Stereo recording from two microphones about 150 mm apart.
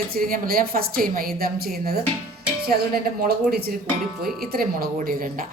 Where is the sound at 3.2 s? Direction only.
90° right.